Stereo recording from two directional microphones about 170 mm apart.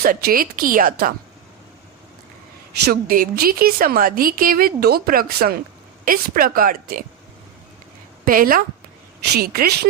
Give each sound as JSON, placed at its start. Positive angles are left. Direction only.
{"t": 0.0, "sound": "a woman's voice", "side_deg": -60}
{"t": 2.8, "sound": "a woman's voice", "side_deg": -60}
{"t": 8.2, "sound": "a woman's voice", "side_deg": -55}